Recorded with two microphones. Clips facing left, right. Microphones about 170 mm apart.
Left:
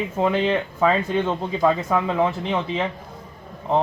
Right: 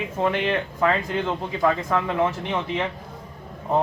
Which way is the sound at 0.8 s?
15° left (ahead or behind).